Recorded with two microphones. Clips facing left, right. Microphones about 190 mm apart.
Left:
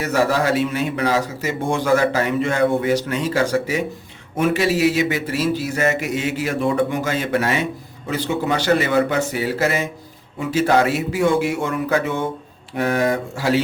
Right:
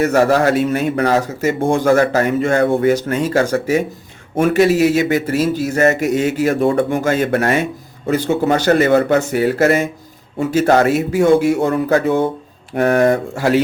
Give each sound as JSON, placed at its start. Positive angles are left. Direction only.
{"t": 0.0, "sound": "a man's voice", "side_deg": -50}
{"t": 12.7, "sound": "a man's voice", "side_deg": -55}